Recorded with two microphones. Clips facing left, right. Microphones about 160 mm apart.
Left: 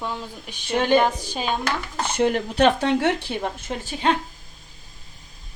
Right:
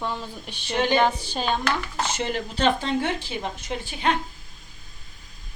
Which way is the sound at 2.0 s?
55° left (ahead or behind).